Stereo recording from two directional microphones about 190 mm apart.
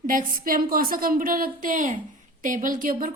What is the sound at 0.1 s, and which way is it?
A woman's voice, 45° right (ahead or behind).